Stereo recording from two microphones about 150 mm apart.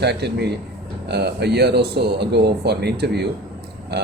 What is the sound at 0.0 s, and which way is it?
A man's voice, 90° right.